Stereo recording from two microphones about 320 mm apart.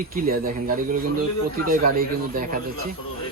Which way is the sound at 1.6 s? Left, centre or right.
Right.